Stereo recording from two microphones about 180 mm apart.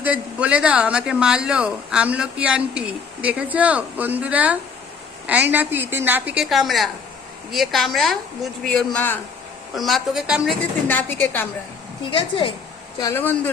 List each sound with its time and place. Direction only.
0.0 s a woman's voice: 10° right (ahead or behind)
10.8 s a woman's voice: 10° left (ahead or behind)
12.1 s a woman's voice: 30° left (ahead or behind)
13.0 s a woman's voice: 15° left (ahead or behind)